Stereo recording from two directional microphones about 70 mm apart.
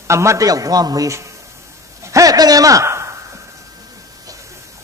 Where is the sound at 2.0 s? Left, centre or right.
Right.